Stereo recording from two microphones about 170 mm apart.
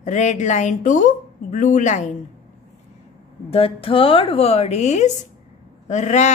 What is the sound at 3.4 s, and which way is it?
A woman's voice, 35° left (ahead or behind).